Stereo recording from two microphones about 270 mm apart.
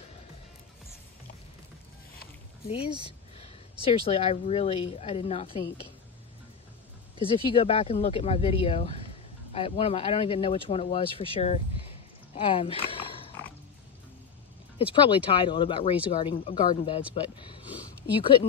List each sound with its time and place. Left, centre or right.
2.9 s speech: centre
3.8 s speech: left
7.2 s speech: centre
15.0 s speech: centre